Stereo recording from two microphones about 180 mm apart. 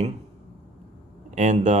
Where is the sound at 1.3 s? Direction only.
40° right (ahead or behind).